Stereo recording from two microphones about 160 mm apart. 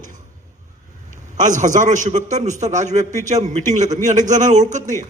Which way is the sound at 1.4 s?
50° right (ahead or behind).